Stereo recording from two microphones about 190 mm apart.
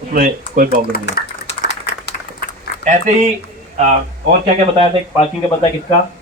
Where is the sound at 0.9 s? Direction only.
50° left (ahead or behind).